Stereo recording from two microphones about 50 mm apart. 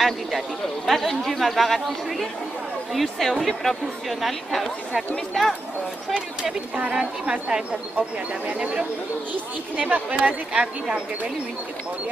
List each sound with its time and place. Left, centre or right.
0.8 s speech: centre
6.4 s speech: right